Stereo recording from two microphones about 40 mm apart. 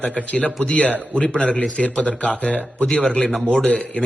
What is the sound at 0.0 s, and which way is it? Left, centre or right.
A man's voice, left.